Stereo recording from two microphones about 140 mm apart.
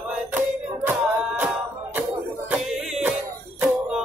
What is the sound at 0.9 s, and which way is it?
Music, 10° right (ahead or behind).